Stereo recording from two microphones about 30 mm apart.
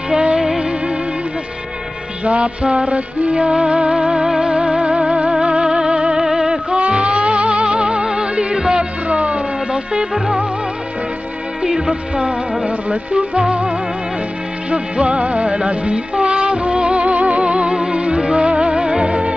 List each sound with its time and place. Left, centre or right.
0.1 s music: right
2.2 s music: right
6.1 s music: right
6.7 s music: right
9.1 s music: right
11.6 s music: right
12.6 s speech: right
14.7 s music: right